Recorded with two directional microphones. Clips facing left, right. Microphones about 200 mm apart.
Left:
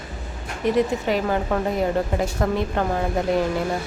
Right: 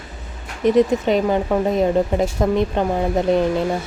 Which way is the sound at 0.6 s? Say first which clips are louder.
Right 5 dB; 20° right (ahead or behind).